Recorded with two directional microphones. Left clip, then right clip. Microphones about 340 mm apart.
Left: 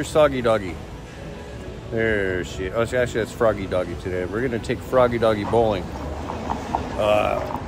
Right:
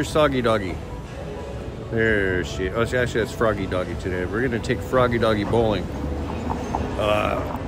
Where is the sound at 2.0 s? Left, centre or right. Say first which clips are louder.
Right 1 dB; centre.